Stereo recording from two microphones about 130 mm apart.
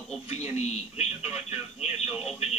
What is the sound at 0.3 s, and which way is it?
Speech, 55° left (ahead or behind).